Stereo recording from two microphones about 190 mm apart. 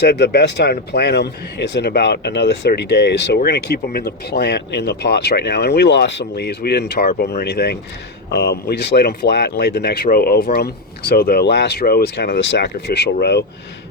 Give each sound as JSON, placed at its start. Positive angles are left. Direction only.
{"t": 0.0, "sound": "speech", "side_deg": 60}